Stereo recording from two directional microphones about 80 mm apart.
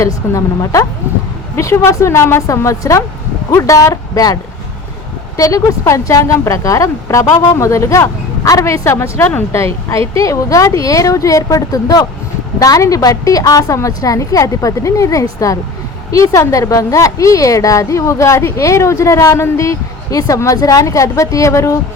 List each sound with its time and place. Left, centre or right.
0.0 s a woman's voice: left
5.4 s a woman's voice: left